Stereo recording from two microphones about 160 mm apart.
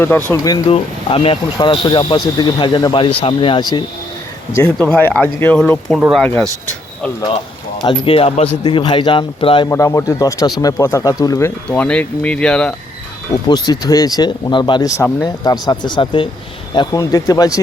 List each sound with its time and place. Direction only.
0.3 s speech: 25° left (ahead or behind)
0.7 s speech: 35° left (ahead or behind)
4.5 s speech: 10° left (ahead or behind)
7.8 s speech: 30° left (ahead or behind)
9.6 s speech: 20° left (ahead or behind)
13.3 s speech: 25° left (ahead or behind)